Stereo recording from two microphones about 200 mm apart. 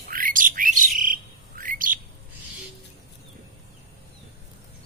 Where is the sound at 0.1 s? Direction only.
45° right (ahead or behind).